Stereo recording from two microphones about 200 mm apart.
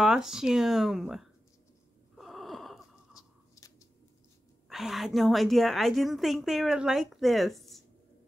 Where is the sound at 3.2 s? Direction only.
15° left (ahead or behind).